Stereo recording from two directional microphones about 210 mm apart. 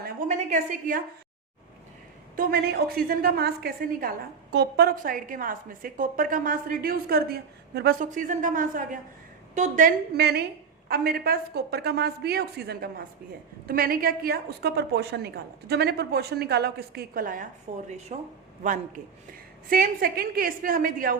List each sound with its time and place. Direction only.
0.0 s a woman's voice: 40° right (ahead or behind)
2.3 s a woman's voice: 45° right (ahead or behind)